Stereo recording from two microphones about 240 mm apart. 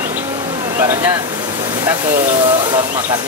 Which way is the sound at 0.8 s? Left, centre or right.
Centre.